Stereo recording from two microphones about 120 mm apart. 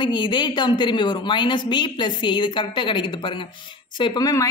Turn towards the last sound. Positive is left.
turn(degrees=30)  # may be behind; listen again after turning